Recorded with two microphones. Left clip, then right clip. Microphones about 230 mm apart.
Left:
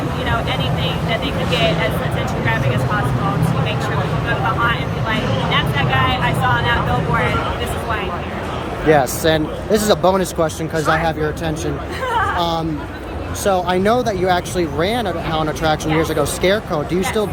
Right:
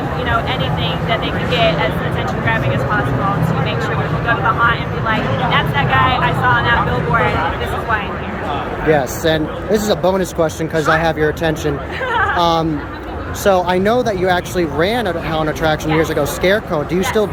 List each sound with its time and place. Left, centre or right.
1.1 s speech: centre
4.3 s speech: centre
8.9 s speech: centre
12.1 s a sound: centre
12.4 s speech: centre